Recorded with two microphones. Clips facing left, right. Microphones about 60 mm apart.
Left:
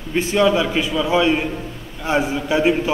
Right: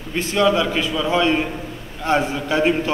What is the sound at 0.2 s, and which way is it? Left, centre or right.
A man's voice, left.